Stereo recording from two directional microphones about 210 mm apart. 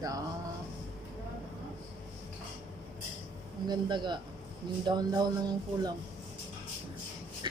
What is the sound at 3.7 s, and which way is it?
Speech, 20° right (ahead or behind).